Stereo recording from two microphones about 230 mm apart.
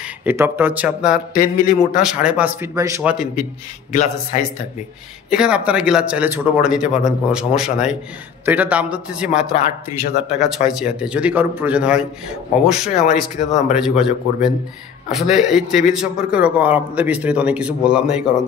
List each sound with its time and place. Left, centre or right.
0.2 s speech: centre
1.3 s speech: left
2.0 s a man's voice: centre
3.9 s speech: left
5.3 s a man's voice: centre
12.9 s speech: left
13.7 s a man's voice: centre